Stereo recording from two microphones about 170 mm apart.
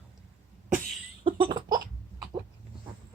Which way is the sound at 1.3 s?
30° right (ahead or behind).